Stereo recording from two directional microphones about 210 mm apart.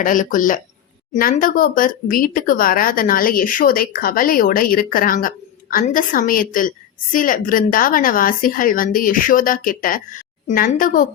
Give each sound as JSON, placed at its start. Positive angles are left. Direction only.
{"t": 0.0, "sound": "a woman's voice", "side_deg": 40}